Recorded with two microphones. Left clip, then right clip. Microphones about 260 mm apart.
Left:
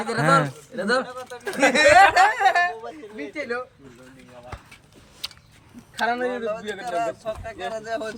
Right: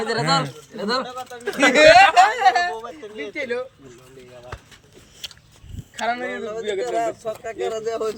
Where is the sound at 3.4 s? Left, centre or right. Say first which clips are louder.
Right 3 dB; centre.